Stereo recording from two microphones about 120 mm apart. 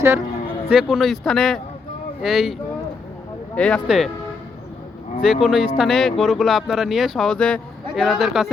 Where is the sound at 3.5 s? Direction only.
10° left (ahead or behind).